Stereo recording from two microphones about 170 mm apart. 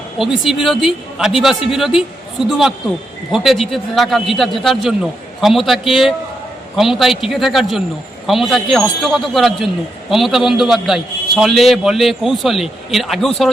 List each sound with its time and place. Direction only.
0.2 s a man's voice: centre (ahead or behind)